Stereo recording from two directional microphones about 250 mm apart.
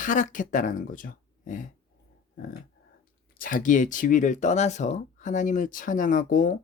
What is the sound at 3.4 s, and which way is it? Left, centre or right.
Speech, left.